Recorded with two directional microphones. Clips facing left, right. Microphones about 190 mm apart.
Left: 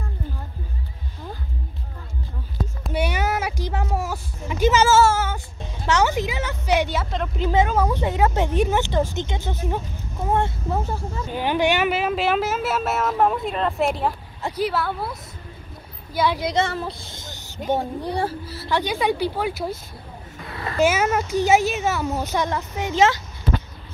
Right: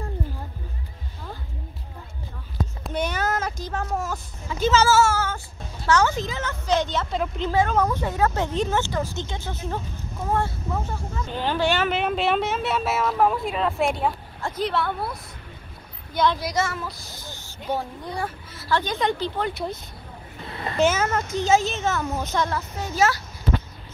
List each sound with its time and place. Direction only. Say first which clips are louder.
2.8 s child singing: left 2 dB; 10° left (ahead or behind)
3.8 s a sound: left 2 dB; 10° left (ahead or behind)
4.9 s female singing: left 3 dB; 25° left (ahead or behind)
5.9 s a woman's voice: left 1 dB; 20° left (ahead or behind)
11.3 s speech: left 2 dB; 15° left (ahead or behind)
16.3 s a child's voice: left 3 dB; 25° left (ahead or behind)
18.7 s a woman's voice: left 2 dB; 15° left (ahead or behind)
20.4 s a sound: left 1 dB; 25° right (ahead or behind)
20.8 s a woman's voice: left 2 dB; 15° left (ahead or behind)